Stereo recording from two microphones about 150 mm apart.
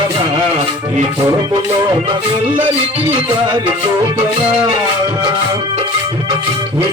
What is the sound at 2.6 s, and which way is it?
Music, 35° right (ahead or behind).